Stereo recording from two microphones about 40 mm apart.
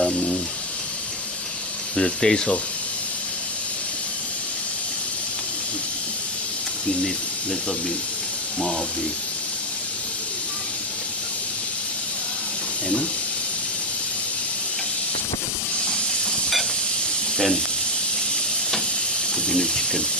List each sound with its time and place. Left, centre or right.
2.0 s speech: centre
15.8 s hiss: centre
19.4 s snake: centre